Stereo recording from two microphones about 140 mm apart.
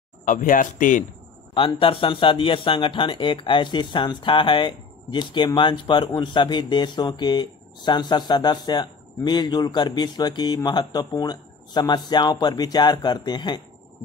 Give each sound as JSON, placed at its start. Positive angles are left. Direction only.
{"t": 0.2, "sound": "speech", "side_deg": 75}
{"t": 1.5, "sound": "speech", "side_deg": 40}